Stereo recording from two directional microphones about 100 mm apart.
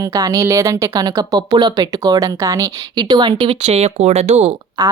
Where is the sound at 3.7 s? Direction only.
90° right.